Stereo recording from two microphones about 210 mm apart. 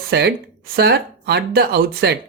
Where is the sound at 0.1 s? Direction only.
50° right (ahead or behind).